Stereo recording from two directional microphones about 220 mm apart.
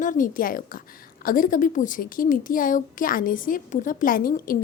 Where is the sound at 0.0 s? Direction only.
35° left (ahead or behind).